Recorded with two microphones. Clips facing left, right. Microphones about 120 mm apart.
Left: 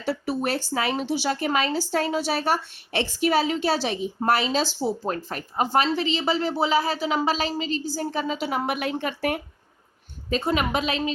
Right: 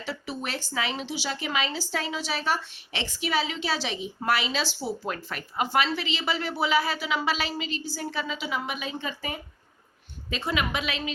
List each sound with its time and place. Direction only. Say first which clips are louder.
0.0 s speech: left 8 dB; 60° left (ahead or behind)
0.4 s a woman's voice: left 4 dB; 45° left (ahead or behind); by 9.4 s 65° left (ahead or behind)
10.2 s a woman's voice: left 5 dB; 40° left (ahead or behind)